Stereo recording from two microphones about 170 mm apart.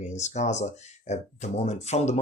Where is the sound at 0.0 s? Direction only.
45° left (ahead or behind).